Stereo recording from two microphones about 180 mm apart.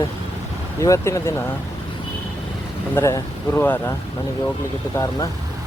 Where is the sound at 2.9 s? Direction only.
15° left (ahead or behind).